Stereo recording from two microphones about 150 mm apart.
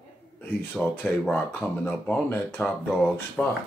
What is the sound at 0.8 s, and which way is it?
Speech, 5° right (ahead or behind).